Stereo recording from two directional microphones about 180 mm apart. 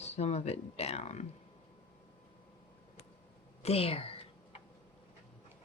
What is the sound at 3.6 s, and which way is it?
Speech, 35° left (ahead or behind).